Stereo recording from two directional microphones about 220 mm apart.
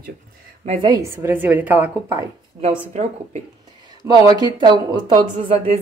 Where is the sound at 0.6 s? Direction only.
25° right (ahead or behind).